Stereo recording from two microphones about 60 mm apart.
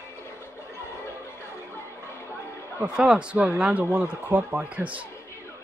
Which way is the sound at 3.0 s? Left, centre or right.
Centre.